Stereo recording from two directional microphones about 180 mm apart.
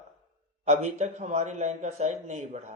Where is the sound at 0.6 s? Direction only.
40° right (ahead or behind).